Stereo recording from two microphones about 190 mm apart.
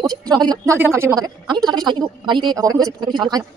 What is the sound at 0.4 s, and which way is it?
A woman's voice, 20° right (ahead or behind).